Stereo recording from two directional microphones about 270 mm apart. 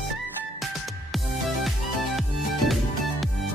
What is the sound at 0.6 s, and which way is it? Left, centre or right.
Music, centre.